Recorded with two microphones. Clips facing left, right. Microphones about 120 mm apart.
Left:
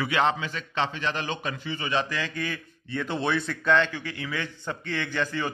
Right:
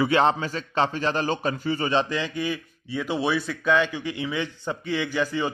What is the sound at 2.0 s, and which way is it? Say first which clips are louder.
A man's voice: right 4 dB; 20° right (ahead or behind).